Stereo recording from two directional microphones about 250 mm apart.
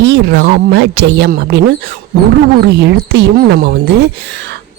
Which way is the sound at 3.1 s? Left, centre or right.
Right.